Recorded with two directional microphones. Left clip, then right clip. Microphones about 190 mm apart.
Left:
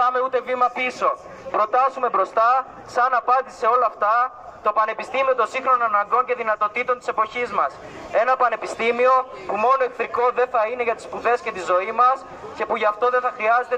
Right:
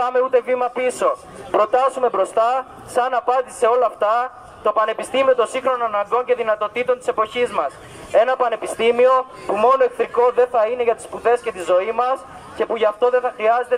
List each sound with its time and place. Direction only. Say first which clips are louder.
0.0 s a man's voice: right 3 dB; 30° right (ahead or behind)